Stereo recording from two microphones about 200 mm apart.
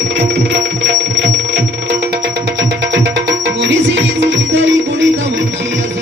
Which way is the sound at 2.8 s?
65° right (ahead or behind).